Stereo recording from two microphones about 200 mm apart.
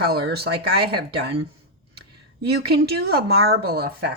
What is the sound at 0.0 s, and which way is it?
Speech, 50° right (ahead or behind).